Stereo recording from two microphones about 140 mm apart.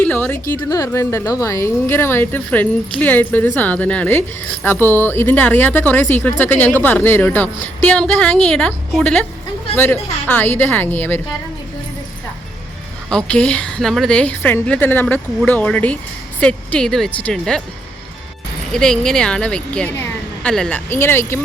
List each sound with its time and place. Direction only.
0.0 s a sound: 10° left (ahead or behind)
0.7 s speech: 25° left (ahead or behind)
13.1 s speech: 5° left (ahead or behind)
18.7 s speech: 5° left (ahead or behind)
19.9 s a sound: 15° left (ahead or behind)
20.5 s speech: 5° left (ahead or behind)